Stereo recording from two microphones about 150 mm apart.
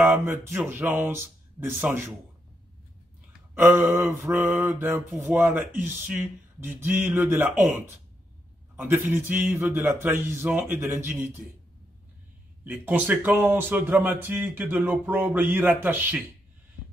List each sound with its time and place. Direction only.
0.0 s a man's voice: 15° right (ahead or behind)
3.5 s a man's voice: 15° right (ahead or behind)
12.6 s a man's voice: 10° right (ahead or behind)